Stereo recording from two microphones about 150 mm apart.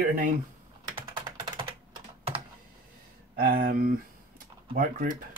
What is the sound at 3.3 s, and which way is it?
Speech, 80° right.